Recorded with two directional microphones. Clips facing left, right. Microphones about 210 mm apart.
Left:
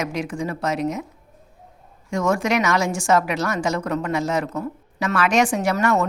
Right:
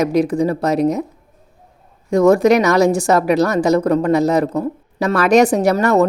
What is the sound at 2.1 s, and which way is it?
A woman's voice, 35° right (ahead or behind).